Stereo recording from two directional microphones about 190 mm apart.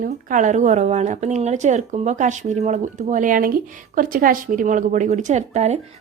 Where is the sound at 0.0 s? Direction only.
45° right (ahead or behind).